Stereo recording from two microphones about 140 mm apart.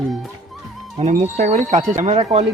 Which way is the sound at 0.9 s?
60° right (ahead or behind).